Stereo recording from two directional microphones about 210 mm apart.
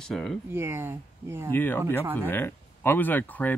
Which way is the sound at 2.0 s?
10° right (ahead or behind).